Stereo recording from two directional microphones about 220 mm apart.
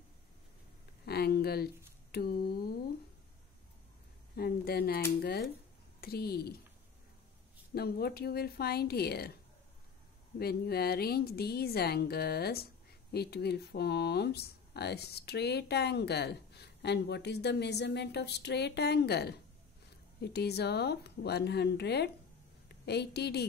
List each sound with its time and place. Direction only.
1.0 s a sound: 45° left (ahead or behind)
2.1 s speech: 45° left (ahead or behind)
4.4 s speech: 45° left (ahead or behind)
7.7 s speech: 45° left (ahead or behind)
10.4 s a woman's voice: 45° left (ahead or behind)